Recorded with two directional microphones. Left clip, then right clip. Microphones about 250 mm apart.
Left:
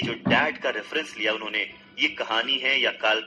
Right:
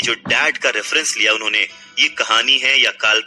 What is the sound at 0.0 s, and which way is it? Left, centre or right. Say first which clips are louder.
Speech: right 7 dB; right.